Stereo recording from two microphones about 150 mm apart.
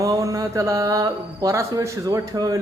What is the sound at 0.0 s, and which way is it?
Speech, 20° right (ahead or behind).